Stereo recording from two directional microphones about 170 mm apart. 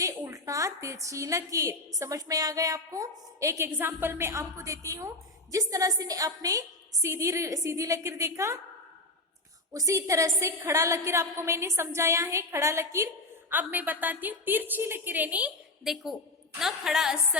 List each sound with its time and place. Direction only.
0.2 s a sound: 20° right (ahead or behind)
1.0 s a woman's voice: 20° right (ahead or behind)
9.7 s a woman's voice: 20° right (ahead or behind); by 17.2 s 5° right (ahead or behind)